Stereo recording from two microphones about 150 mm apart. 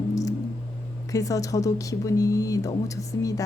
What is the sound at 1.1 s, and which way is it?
A woman's voice, 20° left (ahead or behind).